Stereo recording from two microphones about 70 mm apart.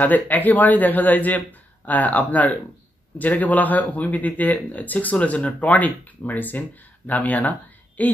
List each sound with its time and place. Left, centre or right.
0.0 s speech: left